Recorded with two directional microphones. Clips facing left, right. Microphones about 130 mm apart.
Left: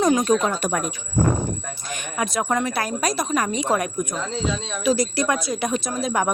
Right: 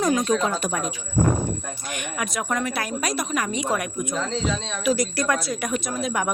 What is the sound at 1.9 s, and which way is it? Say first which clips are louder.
A woman's voice: left 3 dB; 35° left (ahead or behind).